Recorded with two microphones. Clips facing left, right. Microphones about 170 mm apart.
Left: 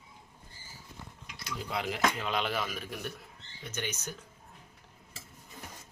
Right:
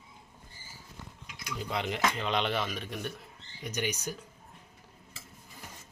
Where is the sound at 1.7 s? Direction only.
Centre (ahead or behind).